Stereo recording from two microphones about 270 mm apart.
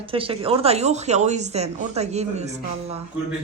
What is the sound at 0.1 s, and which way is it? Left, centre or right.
Speech, centre.